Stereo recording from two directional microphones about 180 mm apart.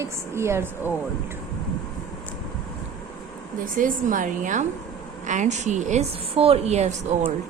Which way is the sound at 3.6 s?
50° right (ahead or behind).